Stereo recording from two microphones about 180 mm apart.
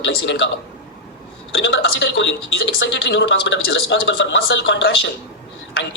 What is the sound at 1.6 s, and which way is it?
Speech, 90° left.